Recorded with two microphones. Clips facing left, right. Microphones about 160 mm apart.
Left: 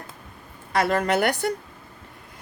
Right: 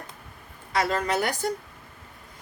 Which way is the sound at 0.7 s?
55° left (ahead or behind).